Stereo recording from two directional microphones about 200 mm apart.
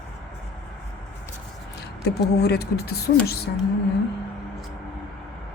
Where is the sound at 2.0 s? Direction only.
55° left (ahead or behind).